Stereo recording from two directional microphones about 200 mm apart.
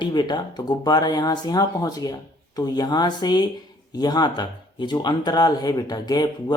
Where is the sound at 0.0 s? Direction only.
20° left (ahead or behind).